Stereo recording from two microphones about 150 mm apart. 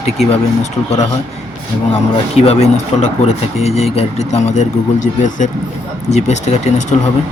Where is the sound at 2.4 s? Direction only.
45° left (ahead or behind).